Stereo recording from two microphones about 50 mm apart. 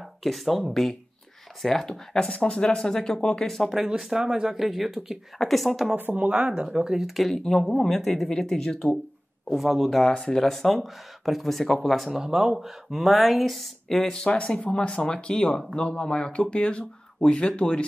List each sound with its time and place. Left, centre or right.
0.2 s speech: centre
3.7 s speech: centre
6.1 s speech: right
6.9 s speech: centre
9.5 s speech: centre
11.9 s speech: centre
14.2 s speech: centre
15.8 s speech: left